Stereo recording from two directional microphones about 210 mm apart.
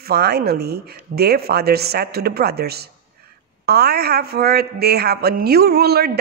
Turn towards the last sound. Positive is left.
turn(degrees=-50)  # may be behind; listen again after turning